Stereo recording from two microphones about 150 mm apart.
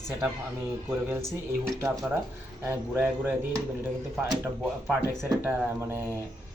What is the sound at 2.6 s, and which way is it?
Speech, 15° right (ahead or behind).